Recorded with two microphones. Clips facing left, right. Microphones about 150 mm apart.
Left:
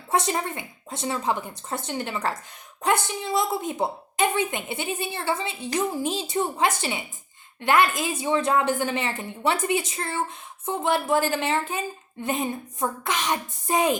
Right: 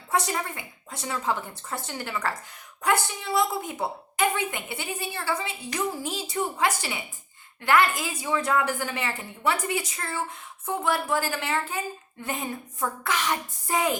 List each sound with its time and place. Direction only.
0.1 s a woman's voice: 25° left (ahead or behind)